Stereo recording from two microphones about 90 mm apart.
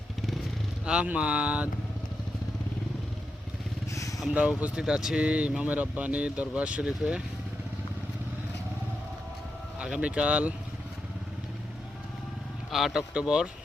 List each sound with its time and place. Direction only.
0.9 s speech: 10° right (ahead or behind)
4.4 s speech: 15° right (ahead or behind)
9.7 s speech: 10° right (ahead or behind)
12.7 s speech: 5° right (ahead or behind)